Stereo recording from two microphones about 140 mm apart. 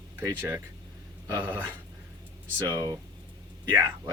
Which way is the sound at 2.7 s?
25° right (ahead or behind).